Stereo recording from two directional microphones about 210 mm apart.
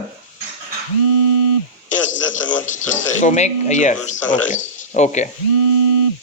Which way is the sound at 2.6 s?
35° left (ahead or behind).